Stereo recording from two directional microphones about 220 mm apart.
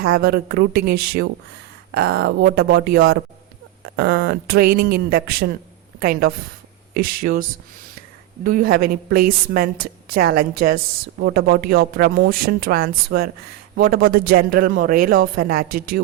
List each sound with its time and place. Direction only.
0.0 s a woman's voice: 45° right (ahead or behind)
8.4 s a woman's voice: 40° right (ahead or behind)